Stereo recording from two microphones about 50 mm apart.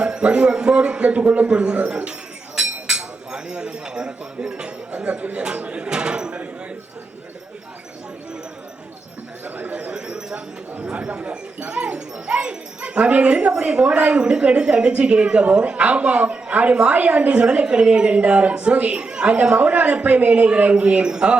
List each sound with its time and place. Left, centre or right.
0.0 s speech: centre
9.9 s a sound: centre
10.8 s speech: right